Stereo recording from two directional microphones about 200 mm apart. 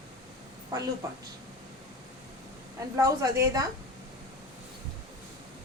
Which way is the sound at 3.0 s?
15° right (ahead or behind).